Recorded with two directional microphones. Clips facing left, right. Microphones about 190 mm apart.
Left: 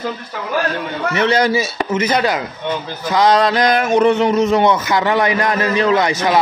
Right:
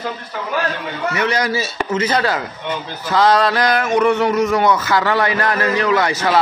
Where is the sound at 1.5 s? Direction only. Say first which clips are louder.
Left 2 dB; 15° left (ahead or behind).